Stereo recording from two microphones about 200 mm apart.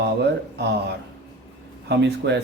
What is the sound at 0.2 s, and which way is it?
Mantra, 55° right (ahead or behind).